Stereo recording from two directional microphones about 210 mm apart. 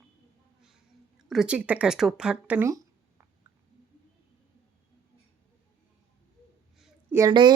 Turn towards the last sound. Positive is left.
turn(degrees=-20)  # may be behind; listen again after turning